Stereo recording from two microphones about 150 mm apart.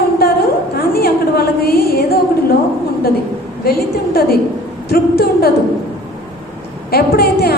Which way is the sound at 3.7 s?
90° left.